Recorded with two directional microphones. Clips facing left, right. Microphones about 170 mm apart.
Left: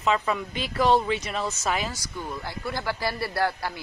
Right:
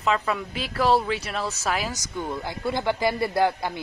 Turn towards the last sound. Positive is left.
turn(degrees=-20)  # may be behind; listen again after turning